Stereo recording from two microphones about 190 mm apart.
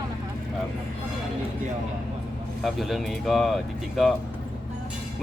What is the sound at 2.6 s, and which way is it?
A man's voice, centre (ahead or behind).